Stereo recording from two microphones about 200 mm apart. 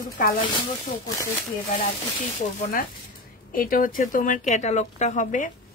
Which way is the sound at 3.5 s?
45° left (ahead or behind).